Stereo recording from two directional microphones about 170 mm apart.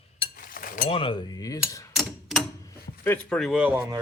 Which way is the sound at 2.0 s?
Centre (ahead or behind).